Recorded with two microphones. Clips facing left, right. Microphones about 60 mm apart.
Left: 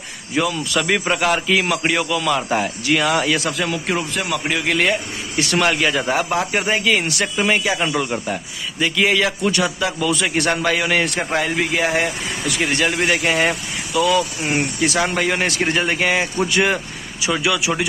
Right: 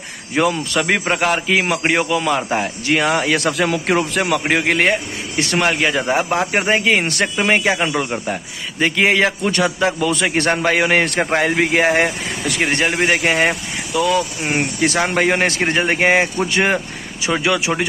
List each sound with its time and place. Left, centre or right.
0.3 s speech: right
0.8 s a man's voice: right
3.3 s a man's voice: right